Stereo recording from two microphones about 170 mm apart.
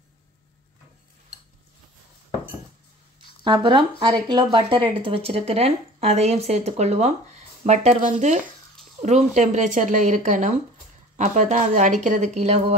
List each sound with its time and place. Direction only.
3.4 s speech: 30° right (ahead or behind)